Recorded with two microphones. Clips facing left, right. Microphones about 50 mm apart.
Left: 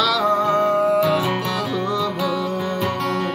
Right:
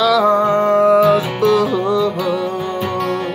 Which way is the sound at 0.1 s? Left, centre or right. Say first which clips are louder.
Right 5 dB; right.